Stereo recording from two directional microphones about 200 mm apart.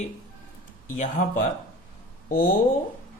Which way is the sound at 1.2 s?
40° left (ahead or behind).